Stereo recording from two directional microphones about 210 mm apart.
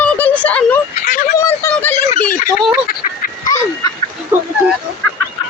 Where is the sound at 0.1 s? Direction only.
5° left (ahead or behind).